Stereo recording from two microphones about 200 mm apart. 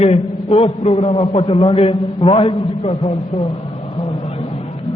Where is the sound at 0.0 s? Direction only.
30° left (ahead or behind).